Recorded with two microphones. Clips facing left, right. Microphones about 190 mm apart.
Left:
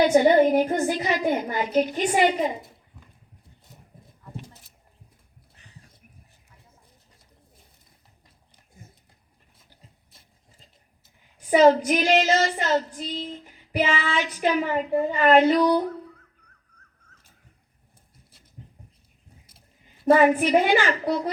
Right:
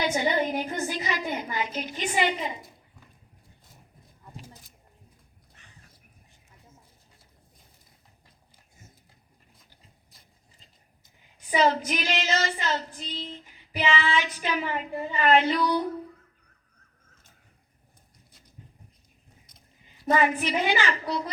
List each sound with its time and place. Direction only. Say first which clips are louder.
0.0 s child singing: left 9 dB; 50° left (ahead or behind)
11.5 s child singing: left 7 dB; 45° left (ahead or behind)
20.1 s child singing: left 7 dB; 45° left (ahead or behind)